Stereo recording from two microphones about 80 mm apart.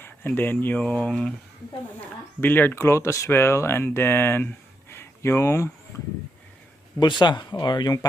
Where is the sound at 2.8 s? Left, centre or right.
Left.